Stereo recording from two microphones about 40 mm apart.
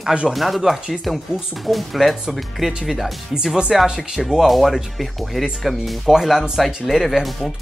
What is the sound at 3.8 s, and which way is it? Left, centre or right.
Speech, centre.